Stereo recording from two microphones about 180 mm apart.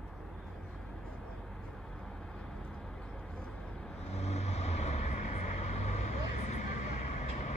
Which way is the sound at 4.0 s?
35° left (ahead or behind).